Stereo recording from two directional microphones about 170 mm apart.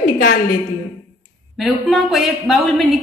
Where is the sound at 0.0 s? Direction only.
60° left (ahead or behind).